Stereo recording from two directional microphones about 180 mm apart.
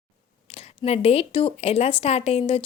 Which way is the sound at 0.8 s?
35° left (ahead or behind).